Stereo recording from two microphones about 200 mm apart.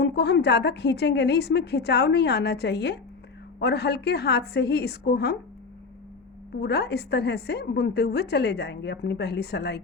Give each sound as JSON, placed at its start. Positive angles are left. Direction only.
{"t": 0.0, "sound": "a woman's voice", "side_deg": 55}
{"t": 6.6, "sound": "a woman's voice", "side_deg": 55}